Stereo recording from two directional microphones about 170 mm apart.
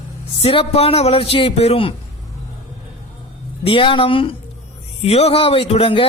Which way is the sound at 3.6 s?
30° left (ahead or behind).